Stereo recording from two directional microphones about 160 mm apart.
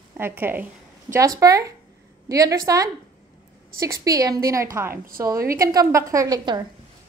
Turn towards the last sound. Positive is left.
turn(degrees=-25)  # may be behind; listen again after turning